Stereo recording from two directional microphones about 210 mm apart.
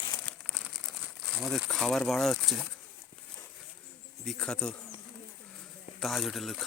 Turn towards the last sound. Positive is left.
turn(degrees=0)  # may be behind; listen again after turning